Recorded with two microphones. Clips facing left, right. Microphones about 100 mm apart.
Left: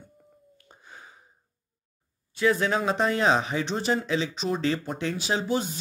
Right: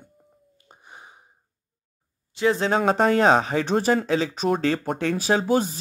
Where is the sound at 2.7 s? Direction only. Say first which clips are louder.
Right 5 dB; 50° right (ahead or behind).